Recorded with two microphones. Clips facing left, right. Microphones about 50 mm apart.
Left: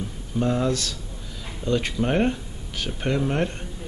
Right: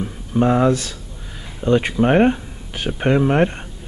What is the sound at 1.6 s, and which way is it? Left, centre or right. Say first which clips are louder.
Speech: right 8 dB; right.